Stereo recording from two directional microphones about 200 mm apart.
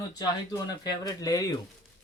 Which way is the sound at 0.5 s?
20° left (ahead or behind).